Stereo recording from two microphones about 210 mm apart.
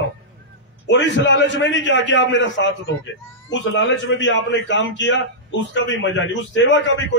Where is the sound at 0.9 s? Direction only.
60° left (ahead or behind).